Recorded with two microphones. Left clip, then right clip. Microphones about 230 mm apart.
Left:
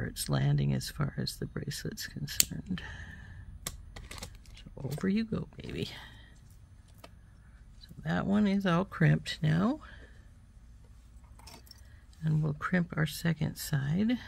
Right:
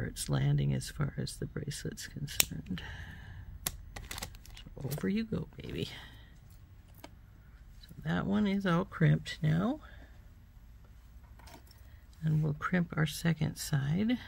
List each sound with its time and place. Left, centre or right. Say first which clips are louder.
0.0 s speech: left 2 dB; centre
3.6 s typewriter: right 2 dB; right
5.0 s speech: left 3 dB; centre
7.8 s speech: left 2 dB; centre
12.2 s speech: left 1 dB; centre